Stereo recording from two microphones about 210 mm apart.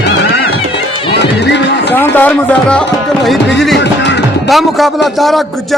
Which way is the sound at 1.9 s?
10° left (ahead or behind).